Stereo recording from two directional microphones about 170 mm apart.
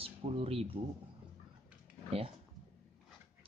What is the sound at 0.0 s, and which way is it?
Speech, 35° right (ahead or behind).